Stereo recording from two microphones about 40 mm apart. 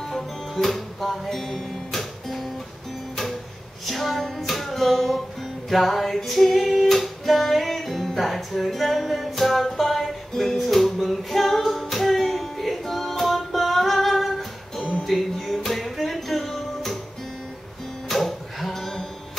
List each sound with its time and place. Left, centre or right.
0.1 s music: centre
3.8 s music: centre
18.0 s music: centre